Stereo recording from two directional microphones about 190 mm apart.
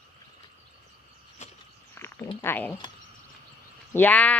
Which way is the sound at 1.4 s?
40° left (ahead or behind).